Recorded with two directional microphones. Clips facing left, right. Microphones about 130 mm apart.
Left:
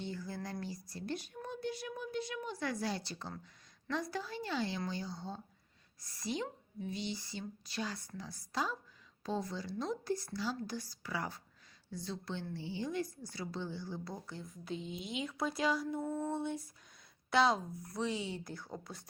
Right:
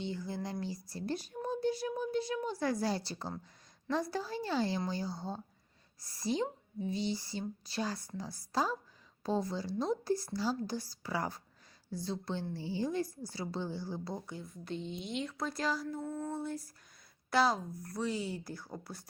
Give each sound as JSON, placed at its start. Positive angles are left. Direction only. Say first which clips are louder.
{"t": 0.0, "sound": "a sound", "louder": "right 3 dB", "side_deg": -25}
{"t": 0.6, "sound": "speech", "louder": "right 4 dB", "side_deg": -30}
{"t": 14.6, "sound": "speech", "louder": "right 1 dB", "side_deg": 0}